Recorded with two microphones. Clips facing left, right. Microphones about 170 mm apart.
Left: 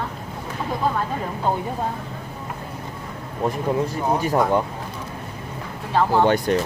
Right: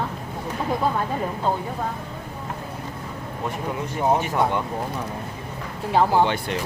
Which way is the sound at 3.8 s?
35° left (ahead or behind).